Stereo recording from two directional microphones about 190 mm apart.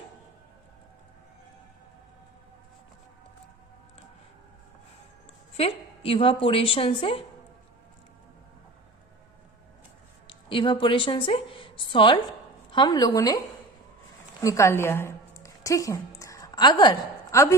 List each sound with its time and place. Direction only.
5.5 s a woman's voice: 30° left (ahead or behind)
10.2 s a woman's voice: 25° left (ahead or behind)
14.4 s a woman's voice: 15° left (ahead or behind)